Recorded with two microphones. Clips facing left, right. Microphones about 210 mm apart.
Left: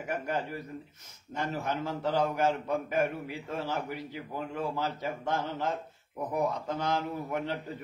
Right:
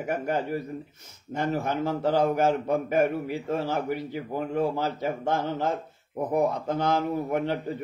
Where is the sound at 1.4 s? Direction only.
55° right (ahead or behind).